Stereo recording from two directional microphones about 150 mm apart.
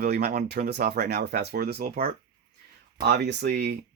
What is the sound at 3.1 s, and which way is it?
Speech, 90° right.